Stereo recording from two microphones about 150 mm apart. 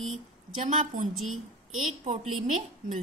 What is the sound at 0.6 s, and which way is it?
Speech, 55° right (ahead or behind).